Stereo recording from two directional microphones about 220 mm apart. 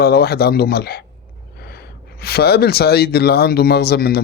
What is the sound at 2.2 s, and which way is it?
Speech, 45° left (ahead or behind).